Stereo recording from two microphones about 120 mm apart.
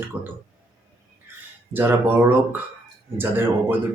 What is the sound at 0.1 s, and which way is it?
Speech, 10° right (ahead or behind).